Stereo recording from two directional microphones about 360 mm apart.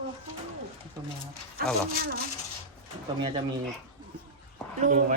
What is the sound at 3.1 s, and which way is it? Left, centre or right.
Speech, centre.